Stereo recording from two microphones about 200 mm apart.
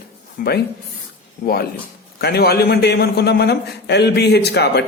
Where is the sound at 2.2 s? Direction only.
50° left (ahead or behind).